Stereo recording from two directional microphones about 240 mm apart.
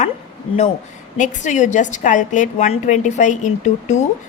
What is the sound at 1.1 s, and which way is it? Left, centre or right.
A woman's voice, left.